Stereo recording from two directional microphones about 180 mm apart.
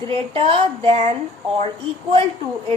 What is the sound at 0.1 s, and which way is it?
Speech, 30° right (ahead or behind).